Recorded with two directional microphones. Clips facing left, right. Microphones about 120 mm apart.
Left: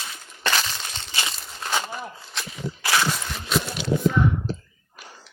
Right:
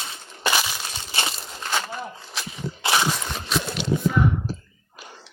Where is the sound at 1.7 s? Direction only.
10° left (ahead or behind).